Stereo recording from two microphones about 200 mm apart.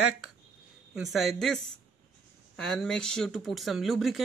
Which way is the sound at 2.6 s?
5° left (ahead or behind).